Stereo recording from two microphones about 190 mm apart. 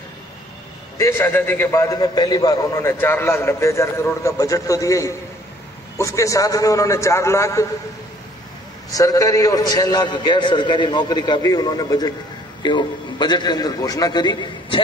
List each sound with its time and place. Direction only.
0.9 s a man's voice: 15° left (ahead or behind)
8.9 s a man's voice: 20° left (ahead or behind)